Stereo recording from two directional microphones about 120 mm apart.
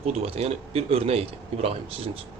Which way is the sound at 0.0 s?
60° right (ahead or behind).